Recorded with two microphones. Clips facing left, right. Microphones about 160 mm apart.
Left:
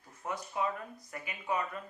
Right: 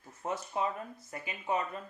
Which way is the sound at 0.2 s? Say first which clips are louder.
Right 1 dB; 25° right (ahead or behind).